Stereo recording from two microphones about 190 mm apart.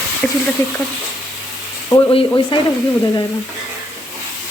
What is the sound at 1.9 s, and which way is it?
Frying, 25° left (ahead or behind).